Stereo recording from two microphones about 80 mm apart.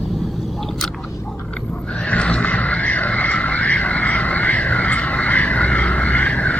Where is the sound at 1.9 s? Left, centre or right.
Centre.